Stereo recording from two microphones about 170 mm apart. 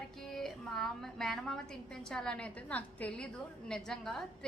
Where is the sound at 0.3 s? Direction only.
Centre (ahead or behind).